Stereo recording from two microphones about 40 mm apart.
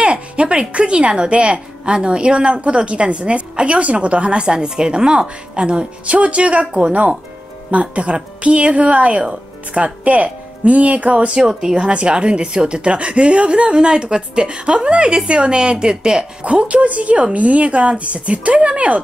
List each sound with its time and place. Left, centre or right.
0.0 s a woman's voice: right